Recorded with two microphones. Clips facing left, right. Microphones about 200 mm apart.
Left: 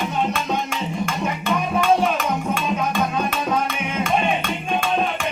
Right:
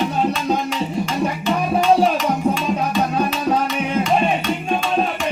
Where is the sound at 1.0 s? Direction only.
55° left (ahead or behind).